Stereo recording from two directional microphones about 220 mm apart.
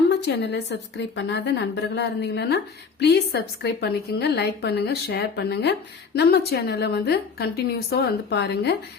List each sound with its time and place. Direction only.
0.1 s a woman's voice: 50° left (ahead or behind)